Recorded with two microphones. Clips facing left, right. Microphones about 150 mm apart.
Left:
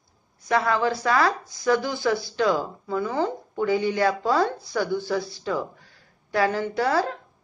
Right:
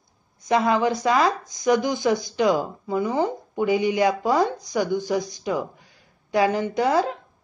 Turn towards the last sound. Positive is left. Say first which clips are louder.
# right 2 dB
turn(degrees=-20)  # may be behind; listen again after turning